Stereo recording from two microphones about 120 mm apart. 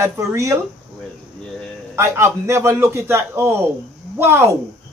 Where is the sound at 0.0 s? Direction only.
25° right (ahead or behind).